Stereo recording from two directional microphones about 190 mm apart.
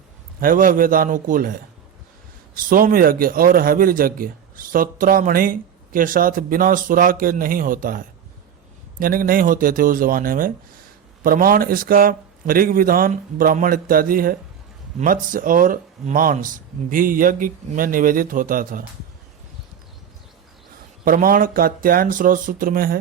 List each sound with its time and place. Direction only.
0.3 s a man's voice: 45° right (ahead or behind)
2.6 s a man's voice: 50° right (ahead or behind)
21.0 s a man's voice: 50° right (ahead or behind)